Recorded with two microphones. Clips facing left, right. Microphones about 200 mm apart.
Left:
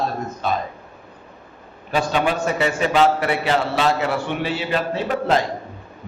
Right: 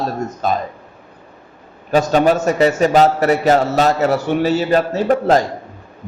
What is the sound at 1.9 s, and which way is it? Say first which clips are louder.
A man's voice: right 7 dB; 40° right (ahead or behind).